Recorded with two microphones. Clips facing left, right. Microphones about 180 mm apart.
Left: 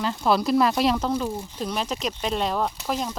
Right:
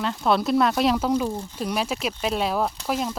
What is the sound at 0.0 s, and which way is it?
Speech, centre (ahead or behind).